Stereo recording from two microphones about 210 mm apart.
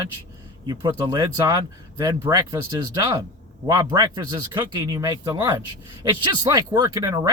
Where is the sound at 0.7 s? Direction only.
20° right (ahead or behind).